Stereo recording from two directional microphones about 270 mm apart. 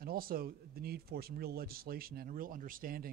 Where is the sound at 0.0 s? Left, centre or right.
Right.